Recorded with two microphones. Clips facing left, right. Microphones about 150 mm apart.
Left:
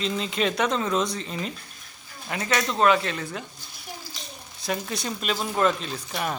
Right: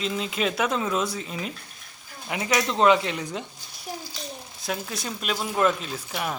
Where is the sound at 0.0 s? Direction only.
5° right (ahead or behind).